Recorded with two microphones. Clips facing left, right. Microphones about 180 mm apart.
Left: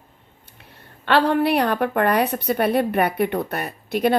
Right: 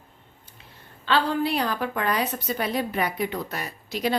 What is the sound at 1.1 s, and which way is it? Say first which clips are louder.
A woman's voice: left 6 dB; 65° left (ahead or behind).